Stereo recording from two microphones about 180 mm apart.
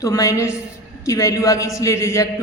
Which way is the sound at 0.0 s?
20° left (ahead or behind).